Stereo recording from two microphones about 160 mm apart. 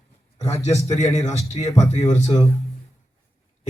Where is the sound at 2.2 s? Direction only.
20° left (ahead or behind).